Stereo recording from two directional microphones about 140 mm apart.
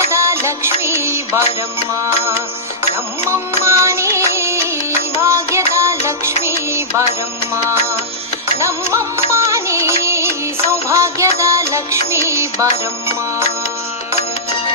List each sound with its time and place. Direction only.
0.0 s music: 20° right (ahead or behind)
3.2 s music: 20° right (ahead or behind)
8.5 s music: 20° right (ahead or behind)